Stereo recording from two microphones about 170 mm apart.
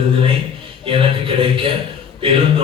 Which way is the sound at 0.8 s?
30° right (ahead or behind).